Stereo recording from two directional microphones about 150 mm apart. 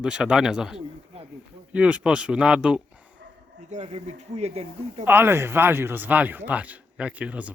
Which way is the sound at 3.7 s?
45° right (ahead or behind).